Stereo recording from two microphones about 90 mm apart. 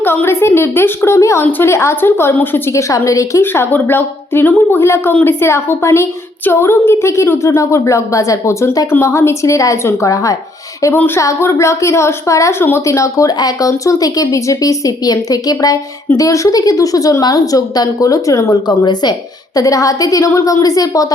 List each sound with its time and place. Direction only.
0.0 s a woman's voice: 25° left (ahead or behind)
3.4 s a woman's voice: 25° left (ahead or behind)
10.9 s a woman's voice: 20° left (ahead or behind)
11.2 s a woman's voice: 35° left (ahead or behind)